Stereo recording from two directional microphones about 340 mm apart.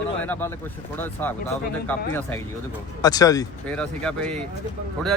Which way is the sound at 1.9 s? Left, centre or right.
Centre.